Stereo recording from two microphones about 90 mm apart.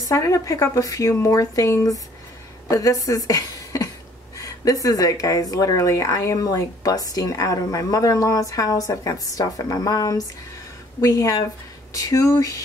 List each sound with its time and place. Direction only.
0.0 s a woman's voice: 35° left (ahead or behind)